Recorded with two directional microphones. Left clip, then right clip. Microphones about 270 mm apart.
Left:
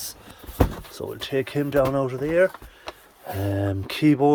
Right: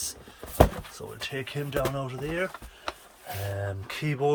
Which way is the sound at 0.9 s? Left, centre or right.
Left.